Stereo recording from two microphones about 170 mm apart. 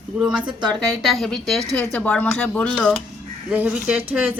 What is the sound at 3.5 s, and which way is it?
Speech, 5° right (ahead or behind).